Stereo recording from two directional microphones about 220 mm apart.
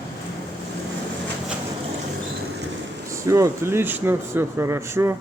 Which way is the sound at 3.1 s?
15° right (ahead or behind).